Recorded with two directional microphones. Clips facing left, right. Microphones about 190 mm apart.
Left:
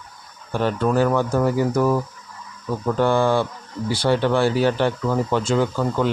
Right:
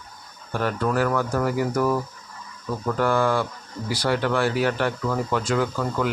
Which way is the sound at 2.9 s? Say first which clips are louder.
Left 3 dB; 25° left (ahead or behind).